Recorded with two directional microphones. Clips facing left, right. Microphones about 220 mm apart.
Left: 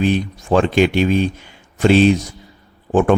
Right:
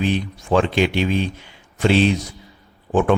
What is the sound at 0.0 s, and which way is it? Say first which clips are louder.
Speech: left 4 dB; 45° left (ahead or behind).